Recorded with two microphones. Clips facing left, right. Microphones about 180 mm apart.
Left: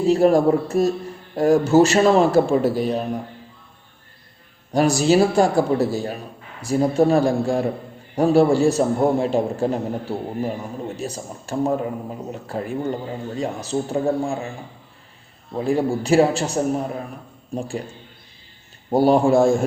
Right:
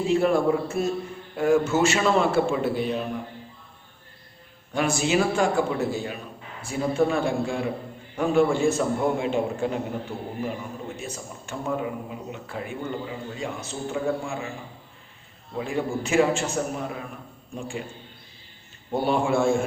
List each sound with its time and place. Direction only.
0.0 s a man's voice: 40° left (ahead or behind)
4.7 s a man's voice: 40° left (ahead or behind)
15.5 s a man's voice: 35° left (ahead or behind)
18.9 s a man's voice: 40° left (ahead or behind)